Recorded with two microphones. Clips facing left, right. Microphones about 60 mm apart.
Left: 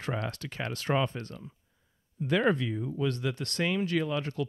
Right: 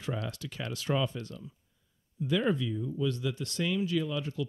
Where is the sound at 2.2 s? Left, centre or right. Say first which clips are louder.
Left 2 dB; left.